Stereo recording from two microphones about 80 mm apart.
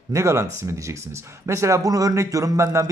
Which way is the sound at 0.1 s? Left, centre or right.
Right.